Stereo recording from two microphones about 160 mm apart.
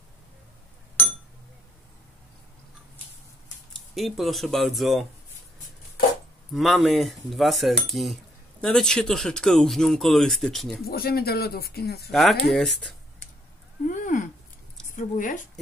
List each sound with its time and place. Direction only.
3.9 s cutlery: centre (ahead or behind)
6.5 s cutlery: centre (ahead or behind)
10.9 s speech: 75° left (ahead or behind)
12.1 s cutlery: centre (ahead or behind)
13.8 s a sound: 50° left (ahead or behind)
14.9 s speech: 55° left (ahead or behind)